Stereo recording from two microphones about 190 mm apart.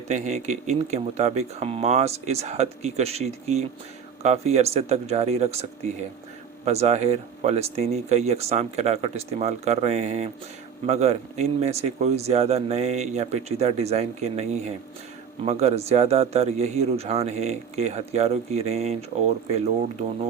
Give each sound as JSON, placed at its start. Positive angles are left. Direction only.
{"t": 0.1, "sound": "speech", "side_deg": -35}
{"t": 6.7, "sound": "speech", "side_deg": -35}